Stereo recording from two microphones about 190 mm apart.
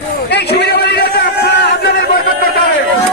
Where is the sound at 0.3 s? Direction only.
65° left (ahead or behind).